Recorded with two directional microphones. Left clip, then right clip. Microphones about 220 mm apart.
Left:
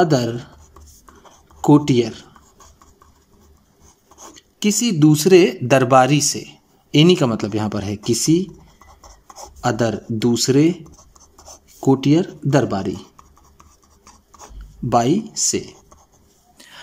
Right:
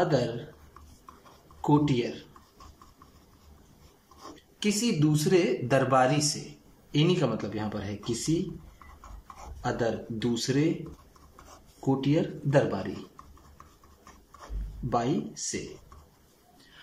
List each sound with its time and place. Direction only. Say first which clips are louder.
0.0 s speech: left 9 dB; 50° left (ahead or behind)
1.6 s speech: left 11 dB; 50° left (ahead or behind)
4.6 s speech: left 10 dB; 45° left (ahead or behind)
9.6 s speech: left 9 dB; 50° left (ahead or behind)
11.8 s speech: left 11 dB; 50° left (ahead or behind)
14.9 s speech: left 11 dB; 50° left (ahead or behind)